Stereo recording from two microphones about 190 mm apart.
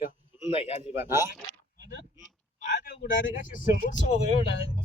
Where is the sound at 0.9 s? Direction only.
10° right (ahead or behind).